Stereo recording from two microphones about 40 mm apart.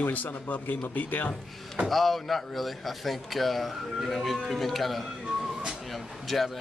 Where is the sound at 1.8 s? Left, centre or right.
Centre.